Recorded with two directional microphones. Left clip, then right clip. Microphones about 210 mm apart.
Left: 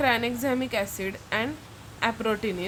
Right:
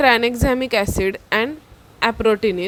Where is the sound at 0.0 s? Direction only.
45° right (ahead or behind).